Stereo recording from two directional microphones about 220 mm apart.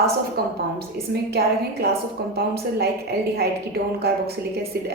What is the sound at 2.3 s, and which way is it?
A woman's voice, 45° right (ahead or behind).